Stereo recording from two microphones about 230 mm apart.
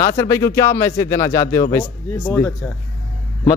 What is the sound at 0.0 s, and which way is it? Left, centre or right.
Speech, centre.